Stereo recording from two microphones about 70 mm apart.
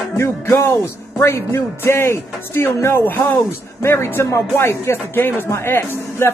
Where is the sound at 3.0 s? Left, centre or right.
Left.